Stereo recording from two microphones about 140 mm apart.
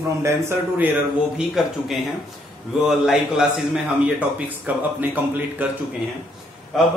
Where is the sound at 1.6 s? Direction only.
5° right (ahead or behind).